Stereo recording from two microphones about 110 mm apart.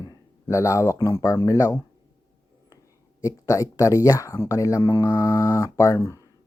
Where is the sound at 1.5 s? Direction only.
30° left (ahead or behind).